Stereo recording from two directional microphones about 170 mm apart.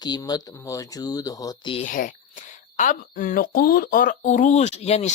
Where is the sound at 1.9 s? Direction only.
50° left (ahead or behind).